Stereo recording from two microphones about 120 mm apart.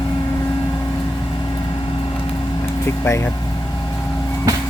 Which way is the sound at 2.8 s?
25° left (ahead or behind).